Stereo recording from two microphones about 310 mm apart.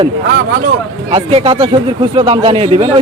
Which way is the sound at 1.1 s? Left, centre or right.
Centre.